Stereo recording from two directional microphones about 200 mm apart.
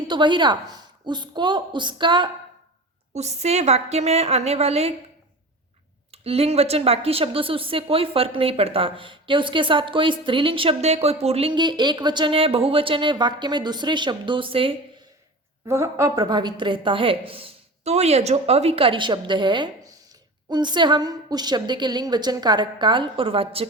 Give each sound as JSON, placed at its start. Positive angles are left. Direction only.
{"t": 0.1, "sound": "a woman's voice", "side_deg": -25}
{"t": 6.1, "sound": "a woman's voice", "side_deg": -30}
{"t": 15.6, "sound": "a woman's voice", "side_deg": -15}